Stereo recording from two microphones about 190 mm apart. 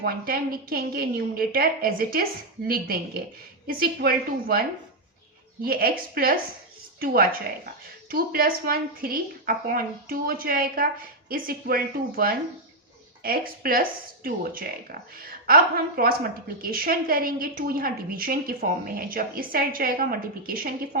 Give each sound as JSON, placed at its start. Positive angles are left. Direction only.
{"t": 0.0, "sound": "a woman's voice", "side_deg": -50}
{"t": 5.6, "sound": "a woman's voice", "side_deg": -50}